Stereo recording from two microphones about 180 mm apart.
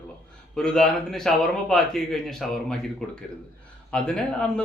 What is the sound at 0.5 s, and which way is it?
A man's voice, 5° left (ahead or behind).